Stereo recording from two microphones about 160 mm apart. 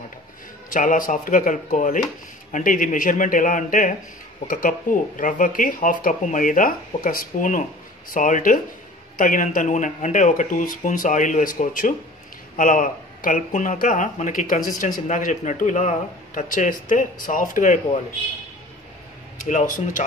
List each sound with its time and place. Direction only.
0.7 s a man's voice: 55° left (ahead or behind)
19.4 s a man's voice: 50° left (ahead or behind)